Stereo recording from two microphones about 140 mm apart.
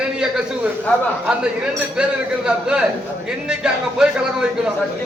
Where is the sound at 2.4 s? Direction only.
5° right (ahead or behind).